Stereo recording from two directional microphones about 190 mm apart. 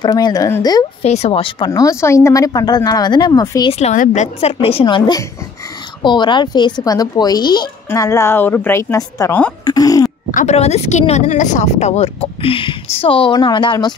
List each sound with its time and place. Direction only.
0.0 s speech: 20° left (ahead or behind)
1.0 s speech: 35° left (ahead or behind)
1.7 s speech: 15° left (ahead or behind)
3.7 s speech: 40° left (ahead or behind); by 10.1 s 20° left (ahead or behind)
10.3 s speech: 35° left (ahead or behind)